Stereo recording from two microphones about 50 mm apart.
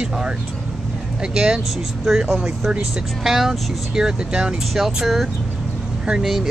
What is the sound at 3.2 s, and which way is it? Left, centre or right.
Speech, centre.